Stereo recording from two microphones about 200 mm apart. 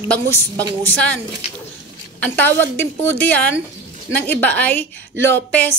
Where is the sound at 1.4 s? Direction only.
30° left (ahead or behind).